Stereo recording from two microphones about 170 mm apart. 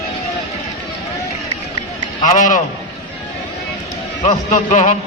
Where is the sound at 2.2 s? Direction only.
50° left (ahead or behind).